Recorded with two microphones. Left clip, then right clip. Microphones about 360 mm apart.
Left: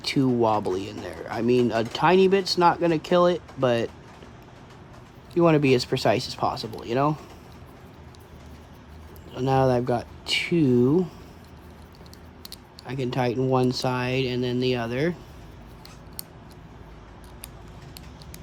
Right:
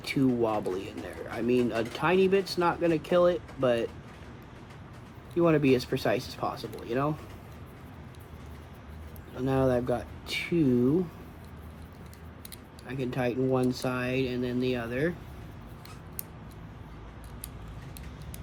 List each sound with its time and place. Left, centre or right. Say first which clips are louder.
0.0 s speech: left 5 dB; left
5.4 s speech: left 4 dB; left
9.3 s speech: left 5 dB; left
12.9 s speech: left 5 dB; left